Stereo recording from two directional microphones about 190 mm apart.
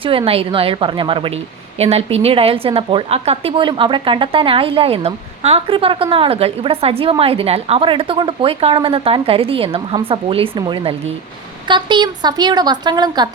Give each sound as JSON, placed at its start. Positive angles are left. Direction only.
{"t": 0.0, "sound": "a woman's voice", "side_deg": -30}